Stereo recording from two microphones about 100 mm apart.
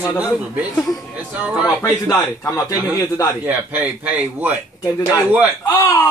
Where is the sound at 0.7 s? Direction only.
Centre (ahead or behind).